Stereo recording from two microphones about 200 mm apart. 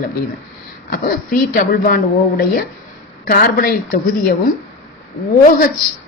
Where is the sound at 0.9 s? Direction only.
45° left (ahead or behind).